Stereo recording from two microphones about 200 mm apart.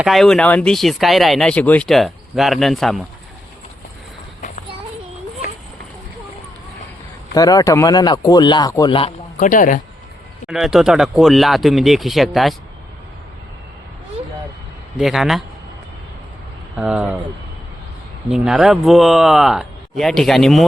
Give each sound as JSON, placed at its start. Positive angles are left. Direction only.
{"t": 0.0, "sound": "speech", "side_deg": 0}
{"t": 7.3, "sound": "speech", "side_deg": 20}
{"t": 9.4, "sound": "speech", "side_deg": 40}
{"t": 10.5, "sound": "speech", "side_deg": 0}
{"t": 14.9, "sound": "speech", "side_deg": 0}
{"t": 16.7, "sound": "speech", "side_deg": -5}
{"t": 18.3, "sound": "speech", "side_deg": -5}